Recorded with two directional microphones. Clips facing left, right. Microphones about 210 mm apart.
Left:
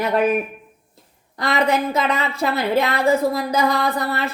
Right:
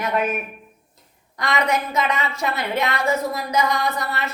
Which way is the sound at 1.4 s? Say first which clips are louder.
Left 3 dB; 30° left (ahead or behind).